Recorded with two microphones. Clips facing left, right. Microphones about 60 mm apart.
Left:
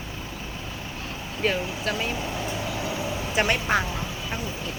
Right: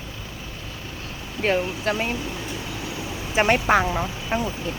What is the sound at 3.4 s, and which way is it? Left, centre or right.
Speech, right.